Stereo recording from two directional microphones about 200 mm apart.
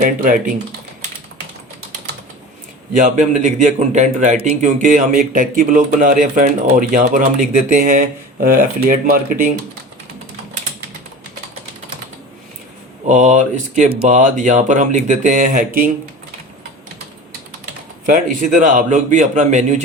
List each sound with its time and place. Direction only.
2.9 s a man's voice: 40° right (ahead or behind)
13.1 s a man's voice: 35° right (ahead or behind)
18.0 s a man's voice: 40° right (ahead or behind)